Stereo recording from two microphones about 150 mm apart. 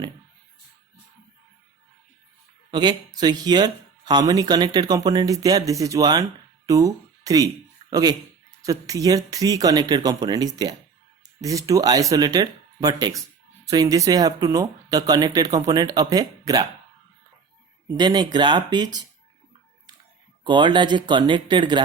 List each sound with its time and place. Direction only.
2.6 s a sound: 30° right (ahead or behind)
3.2 s speech: 25° right (ahead or behind)
17.8 s speech: 30° right (ahead or behind)
20.4 s speech: 30° right (ahead or behind)